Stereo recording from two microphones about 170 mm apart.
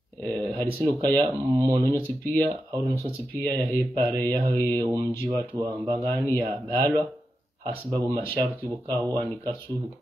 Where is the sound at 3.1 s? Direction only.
25° right (ahead or behind).